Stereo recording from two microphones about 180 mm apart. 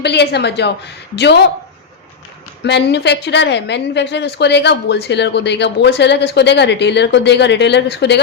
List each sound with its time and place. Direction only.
0.0 s a woman's voice: 70° left (ahead or behind)
2.6 s a woman's voice: 70° left (ahead or behind)